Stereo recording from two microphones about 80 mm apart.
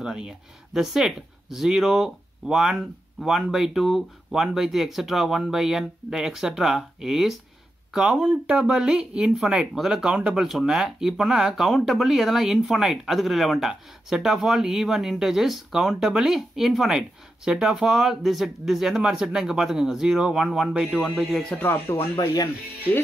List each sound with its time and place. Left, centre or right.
0.0 s speech: centre
21.5 s speech: left